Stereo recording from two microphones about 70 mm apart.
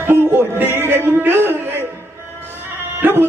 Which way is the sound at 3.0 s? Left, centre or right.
Right.